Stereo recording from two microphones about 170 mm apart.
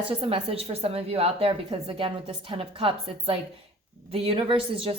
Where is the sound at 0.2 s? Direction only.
35° right (ahead or behind).